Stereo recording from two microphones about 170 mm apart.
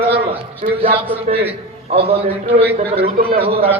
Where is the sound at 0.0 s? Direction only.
30° right (ahead or behind).